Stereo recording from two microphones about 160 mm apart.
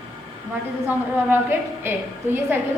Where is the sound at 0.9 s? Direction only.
15° right (ahead or behind).